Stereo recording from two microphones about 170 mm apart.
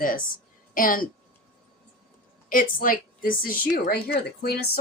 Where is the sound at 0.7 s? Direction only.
55° left (ahead or behind).